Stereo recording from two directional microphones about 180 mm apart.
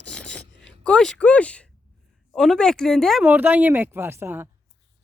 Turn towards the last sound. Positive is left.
turn(degrees=-10)  # may be behind; listen again after turning